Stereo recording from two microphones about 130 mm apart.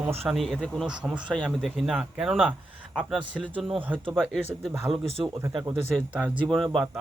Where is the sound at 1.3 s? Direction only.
5° left (ahead or behind).